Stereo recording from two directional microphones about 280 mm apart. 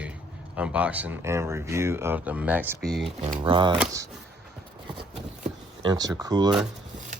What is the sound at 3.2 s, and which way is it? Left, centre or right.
Speech, right.